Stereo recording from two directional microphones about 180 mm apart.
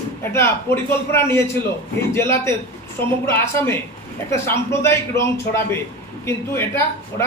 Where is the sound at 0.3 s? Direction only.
15° left (ahead or behind).